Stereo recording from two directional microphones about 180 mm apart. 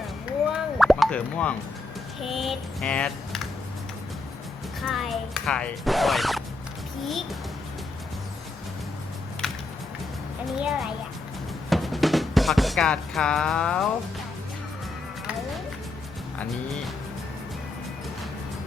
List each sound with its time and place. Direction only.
0.5 s plop: centre (ahead or behind)
2.2 s speech: centre (ahead or behind)
4.8 s speech: centre (ahead or behind)
9.4 s music: 5° left (ahead or behind)
10.6 s speech: centre (ahead or behind)
16.4 s speech: 5° left (ahead or behind)